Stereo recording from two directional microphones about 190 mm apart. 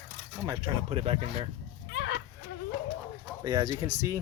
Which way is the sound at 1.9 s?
70° left (ahead or behind).